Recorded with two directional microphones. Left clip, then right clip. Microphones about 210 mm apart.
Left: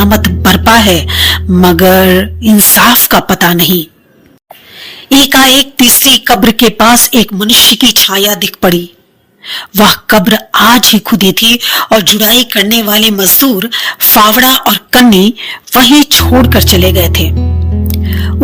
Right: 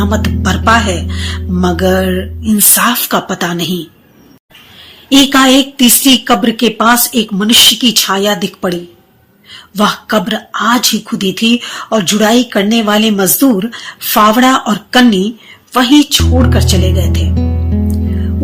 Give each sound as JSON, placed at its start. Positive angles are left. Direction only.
{"t": 0.0, "sound": "speech", "side_deg": 40}
{"t": 5.0, "sound": "speech", "side_deg": 35}
{"t": 17.7, "sound": "music", "side_deg": 0}